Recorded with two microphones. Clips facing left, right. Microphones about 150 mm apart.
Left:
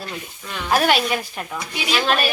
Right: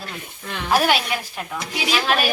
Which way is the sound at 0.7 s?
Centre (ahead or behind).